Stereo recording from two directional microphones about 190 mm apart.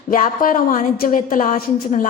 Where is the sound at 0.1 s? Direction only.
45° left (ahead or behind).